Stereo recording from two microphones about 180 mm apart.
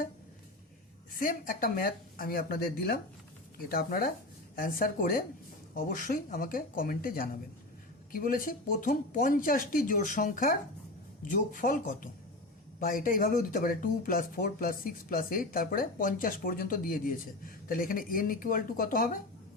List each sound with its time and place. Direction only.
1.2 s speech: 50° left (ahead or behind)